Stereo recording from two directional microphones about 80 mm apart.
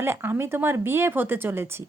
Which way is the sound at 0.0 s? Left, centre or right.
Right.